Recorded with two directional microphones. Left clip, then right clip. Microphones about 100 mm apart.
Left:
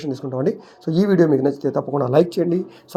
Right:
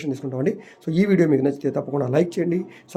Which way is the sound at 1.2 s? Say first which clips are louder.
Left 2 dB; 30° right (ahead or behind).